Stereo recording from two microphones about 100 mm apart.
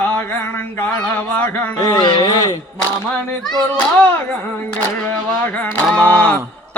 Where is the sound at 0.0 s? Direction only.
20° left (ahead or behind).